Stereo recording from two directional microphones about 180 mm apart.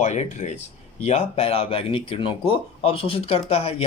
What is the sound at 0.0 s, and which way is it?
Speech, 40° left (ahead or behind).